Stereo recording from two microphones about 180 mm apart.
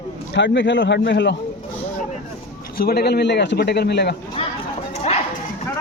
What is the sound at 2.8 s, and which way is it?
A man's voice, 60° left (ahead or behind).